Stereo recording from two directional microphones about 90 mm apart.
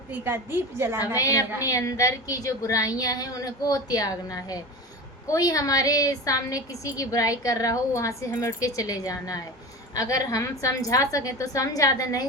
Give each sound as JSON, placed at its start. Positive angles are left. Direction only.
{"t": 0.1, "sound": "a woman's voice", "side_deg": -25}
{"t": 1.1, "sound": "a woman's voice", "side_deg": 40}